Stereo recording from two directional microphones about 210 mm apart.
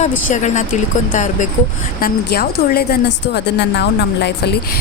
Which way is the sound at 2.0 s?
50° left (ahead or behind).